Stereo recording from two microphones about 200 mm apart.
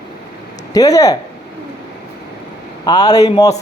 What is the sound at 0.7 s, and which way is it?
Speech, 15° left (ahead or behind).